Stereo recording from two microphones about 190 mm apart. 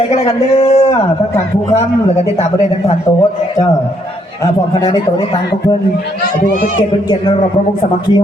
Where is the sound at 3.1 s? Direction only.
20° left (ahead or behind).